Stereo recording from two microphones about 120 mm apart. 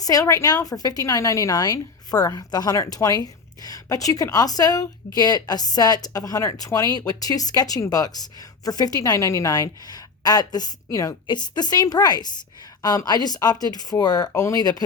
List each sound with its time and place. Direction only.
0.0 s a woman's voice: 30° left (ahead or behind)